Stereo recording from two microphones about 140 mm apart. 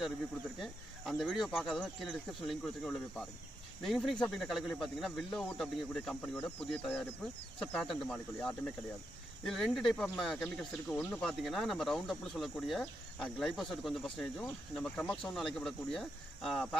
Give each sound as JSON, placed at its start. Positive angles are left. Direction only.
{"t": 0.6, "sound": "speech", "side_deg": 0}